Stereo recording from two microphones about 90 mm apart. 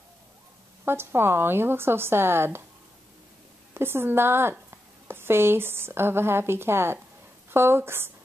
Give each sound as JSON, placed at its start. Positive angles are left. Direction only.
{"t": 0.8, "sound": "speech", "side_deg": -25}
{"t": 3.7, "sound": "speech", "side_deg": -25}